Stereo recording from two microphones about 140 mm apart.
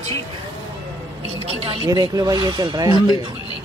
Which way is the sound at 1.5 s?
40° right (ahead or behind).